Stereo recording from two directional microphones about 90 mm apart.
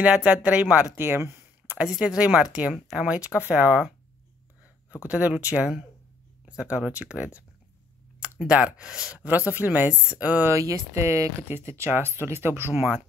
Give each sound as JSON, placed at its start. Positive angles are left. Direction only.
{"t": 0.0, "sound": "speech", "side_deg": -15}
{"t": 0.9, "sound": "a sound", "side_deg": -25}
{"t": 1.8, "sound": "speech", "side_deg": -5}
{"t": 2.7, "sound": "speech", "side_deg": 0}
{"t": 3.1, "sound": "speech", "side_deg": -15}
{"t": 5.0, "sound": "speech", "side_deg": -15}
{"t": 8.2, "sound": "a sound", "side_deg": -15}
{"t": 8.7, "sound": "speech", "side_deg": -10}
{"t": 10.5, "sound": "speech", "side_deg": -35}